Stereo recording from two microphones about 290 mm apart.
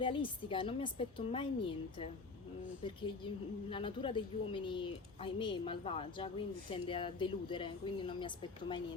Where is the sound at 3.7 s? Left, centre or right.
Centre.